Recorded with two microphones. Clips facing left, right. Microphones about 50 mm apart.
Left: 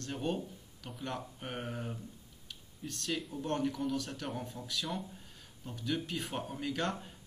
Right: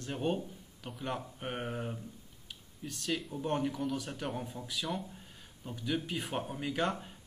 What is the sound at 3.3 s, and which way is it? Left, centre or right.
Speech, centre.